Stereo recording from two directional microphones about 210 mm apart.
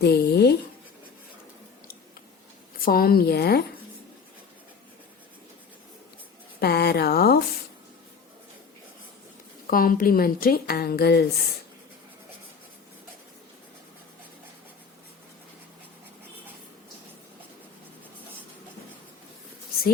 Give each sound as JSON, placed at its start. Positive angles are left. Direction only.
{"t": 0.0, "sound": "writing", "side_deg": 50}
{"t": 2.7, "sound": "a woman's voice", "side_deg": 45}
{"t": 6.6, "sound": "a woman's voice", "side_deg": 50}
{"t": 9.6, "sound": "a woman's voice", "side_deg": 40}